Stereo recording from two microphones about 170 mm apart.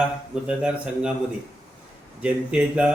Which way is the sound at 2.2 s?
5° right (ahead or behind).